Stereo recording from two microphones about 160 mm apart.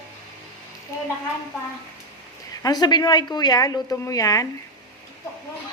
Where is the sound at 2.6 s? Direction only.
25° left (ahead or behind).